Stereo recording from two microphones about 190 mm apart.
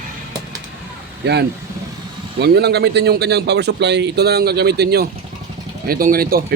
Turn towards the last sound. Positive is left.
turn(degrees=-50)  # may be behind; listen again after turning